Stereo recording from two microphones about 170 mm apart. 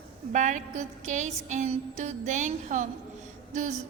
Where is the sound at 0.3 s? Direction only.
45° right (ahead or behind).